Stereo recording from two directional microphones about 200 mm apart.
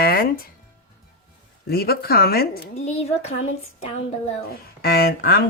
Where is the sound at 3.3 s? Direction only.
85° left.